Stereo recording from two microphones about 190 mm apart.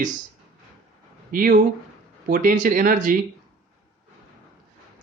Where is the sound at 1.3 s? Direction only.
50° right (ahead or behind).